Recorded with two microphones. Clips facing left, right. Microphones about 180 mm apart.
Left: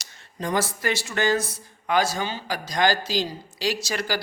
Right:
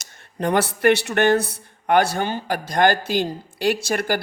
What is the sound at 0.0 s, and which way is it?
Speech, 55° right (ahead or behind).